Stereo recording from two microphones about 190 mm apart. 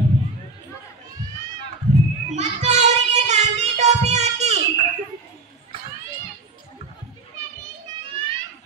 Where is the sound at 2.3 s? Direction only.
35° right (ahead or behind).